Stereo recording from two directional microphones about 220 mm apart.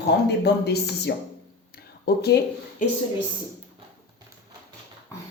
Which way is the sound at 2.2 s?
45° left (ahead or behind).